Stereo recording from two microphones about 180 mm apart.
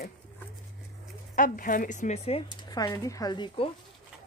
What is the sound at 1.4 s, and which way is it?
Speech, 50° left (ahead or behind).